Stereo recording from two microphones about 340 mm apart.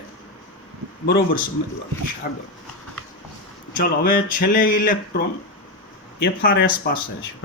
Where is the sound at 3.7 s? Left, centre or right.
Left.